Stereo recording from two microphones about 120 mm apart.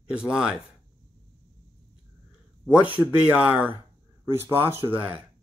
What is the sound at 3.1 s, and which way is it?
Speech, 10° right (ahead or behind).